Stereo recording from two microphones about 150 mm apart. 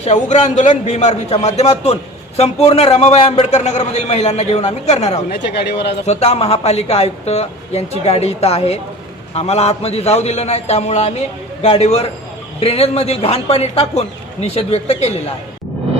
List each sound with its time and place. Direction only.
0.0 s a man's voice: 50° left (ahead or behind)
5.3 s speech: 90° left
6.1 s a man's voice: 45° left (ahead or behind)